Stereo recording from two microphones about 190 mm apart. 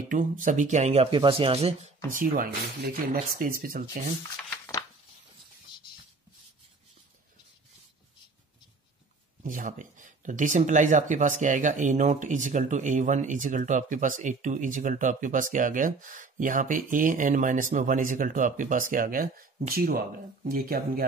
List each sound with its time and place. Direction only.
0.1 s speech: 45° right (ahead or behind)
2.0 s speech: 45° right (ahead or behind)
9.4 s speech: 45° right (ahead or behind)